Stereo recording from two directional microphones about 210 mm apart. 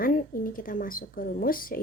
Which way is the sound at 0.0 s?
40° left (ahead or behind).